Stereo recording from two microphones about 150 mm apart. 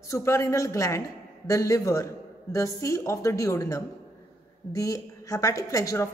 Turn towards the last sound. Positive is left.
turn(degrees=20)  # may be behind; listen again after turning